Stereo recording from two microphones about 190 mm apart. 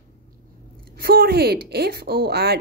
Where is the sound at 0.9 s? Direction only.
50° right (ahead or behind).